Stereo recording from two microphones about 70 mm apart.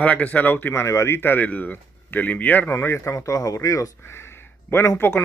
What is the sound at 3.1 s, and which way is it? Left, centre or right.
Speech, left.